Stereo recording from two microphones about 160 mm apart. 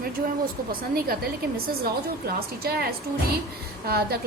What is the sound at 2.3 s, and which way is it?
A woman's voice, 70° right (ahead or behind).